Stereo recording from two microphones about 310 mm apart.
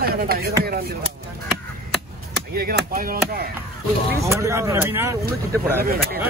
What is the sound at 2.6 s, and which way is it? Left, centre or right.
Chop, right.